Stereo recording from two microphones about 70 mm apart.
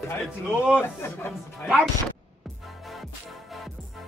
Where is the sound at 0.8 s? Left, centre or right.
Left.